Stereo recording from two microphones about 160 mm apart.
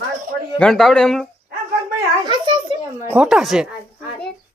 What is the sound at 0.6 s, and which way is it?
Speech, 5° left (ahead or behind).